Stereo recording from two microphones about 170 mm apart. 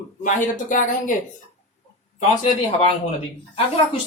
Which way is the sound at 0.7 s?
50° left (ahead or behind).